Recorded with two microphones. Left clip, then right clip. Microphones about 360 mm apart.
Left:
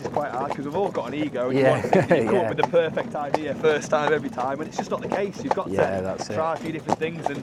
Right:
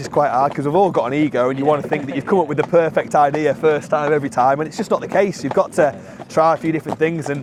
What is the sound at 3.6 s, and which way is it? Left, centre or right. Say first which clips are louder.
Speech: right 2 dB; right.